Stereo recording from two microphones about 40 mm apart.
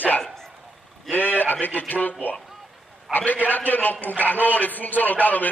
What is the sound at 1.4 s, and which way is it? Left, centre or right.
Speech, left.